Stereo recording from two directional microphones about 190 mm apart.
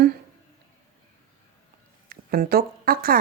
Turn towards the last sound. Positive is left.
turn(degrees=-50)  # may be behind; listen again after turning